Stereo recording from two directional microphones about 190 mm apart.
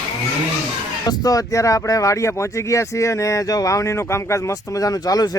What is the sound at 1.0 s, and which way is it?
Speech, 20° left (ahead or behind).